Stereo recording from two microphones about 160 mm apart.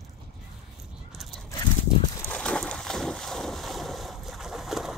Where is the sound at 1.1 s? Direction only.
Centre (ahead or behind).